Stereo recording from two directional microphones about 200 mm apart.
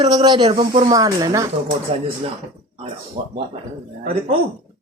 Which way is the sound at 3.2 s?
35° right (ahead or behind).